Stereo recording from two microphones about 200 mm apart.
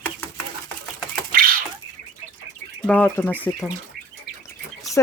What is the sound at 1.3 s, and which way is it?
Bird, 45° right (ahead or behind).